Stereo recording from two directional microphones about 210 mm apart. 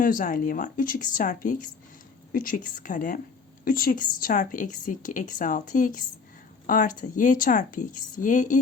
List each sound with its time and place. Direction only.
0.0 s speech: 40° left (ahead or behind)